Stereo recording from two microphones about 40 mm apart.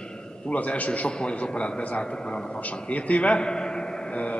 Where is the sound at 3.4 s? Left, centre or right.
Centre.